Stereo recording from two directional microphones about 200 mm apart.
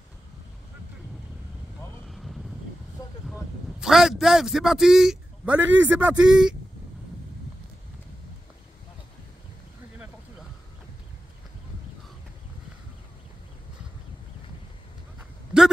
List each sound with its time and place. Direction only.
2.0 s vehicle: centre (ahead or behind)
3.0 s a sound: 20° left (ahead or behind)
3.8 s a man's voice: centre (ahead or behind)